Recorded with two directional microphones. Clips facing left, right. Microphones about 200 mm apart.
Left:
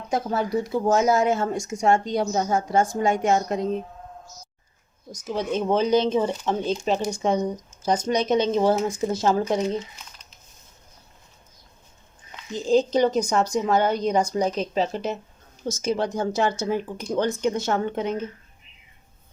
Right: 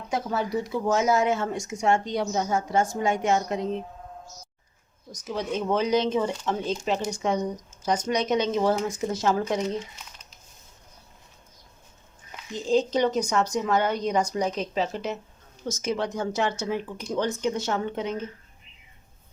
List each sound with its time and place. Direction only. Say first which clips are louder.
0.1 s speech: left 3 dB; 45° left (ahead or behind)
5.3 s speech: left 3 dB; 30° left (ahead or behind)
12.7 s speech: left 3 dB; 35° left (ahead or behind); by 18.2 s 50° left (ahead or behind)